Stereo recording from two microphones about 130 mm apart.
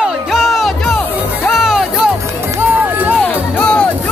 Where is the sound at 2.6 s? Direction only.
15° right (ahead or behind).